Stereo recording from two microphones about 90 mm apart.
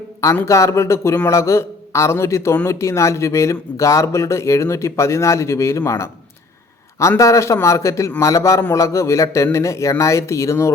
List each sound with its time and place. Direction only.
0.4 s speech: 35° left (ahead or behind)
7.2 s speech: 35° left (ahead or behind)